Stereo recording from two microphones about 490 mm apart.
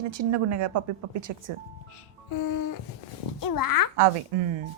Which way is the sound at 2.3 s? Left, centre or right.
Left.